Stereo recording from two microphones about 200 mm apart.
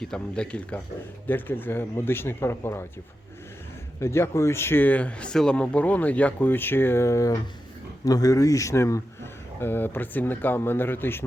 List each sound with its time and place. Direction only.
0.0 s speech: 5° left (ahead or behind)
4.0 s speech: 15° left (ahead or behind)